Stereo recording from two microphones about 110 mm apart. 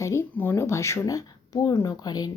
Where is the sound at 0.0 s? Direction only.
25° left (ahead or behind).